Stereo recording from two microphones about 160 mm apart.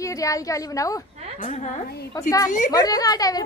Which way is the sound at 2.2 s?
20° left (ahead or behind).